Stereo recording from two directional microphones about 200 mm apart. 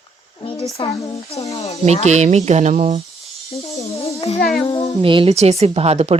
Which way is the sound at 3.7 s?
30° left (ahead or behind).